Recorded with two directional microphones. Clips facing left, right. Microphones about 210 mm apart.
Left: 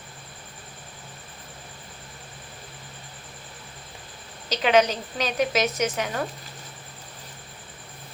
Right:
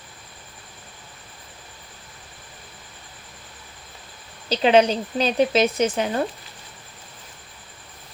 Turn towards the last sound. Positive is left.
turn(degrees=-30)  # may be behind; listen again after turning